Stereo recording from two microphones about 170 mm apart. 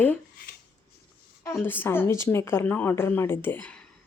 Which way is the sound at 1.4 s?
15° left (ahead or behind).